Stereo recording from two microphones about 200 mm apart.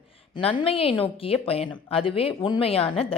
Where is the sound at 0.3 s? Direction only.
25° left (ahead or behind).